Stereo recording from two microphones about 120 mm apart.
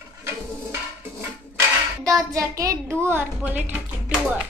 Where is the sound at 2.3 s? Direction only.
30° right (ahead or behind); by 4.4 s 10° right (ahead or behind).